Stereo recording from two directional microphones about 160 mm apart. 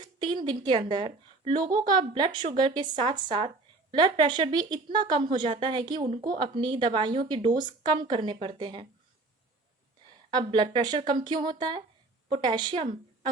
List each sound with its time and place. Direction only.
0.2 s a woman's voice: 30° right (ahead or behind)
10.3 s speech: 30° right (ahead or behind)